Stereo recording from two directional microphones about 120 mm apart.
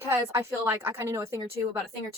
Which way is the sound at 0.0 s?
20° right (ahead or behind).